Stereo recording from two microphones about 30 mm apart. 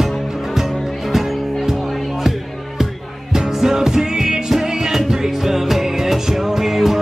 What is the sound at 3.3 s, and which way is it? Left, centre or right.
Music, centre.